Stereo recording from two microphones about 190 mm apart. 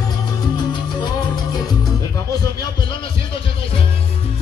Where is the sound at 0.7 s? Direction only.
25° left (ahead or behind).